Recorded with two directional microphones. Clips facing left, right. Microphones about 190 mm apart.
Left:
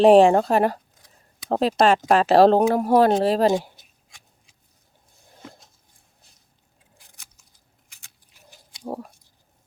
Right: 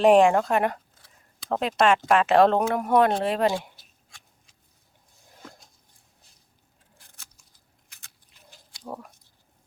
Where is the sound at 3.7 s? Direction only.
20° left (ahead or behind).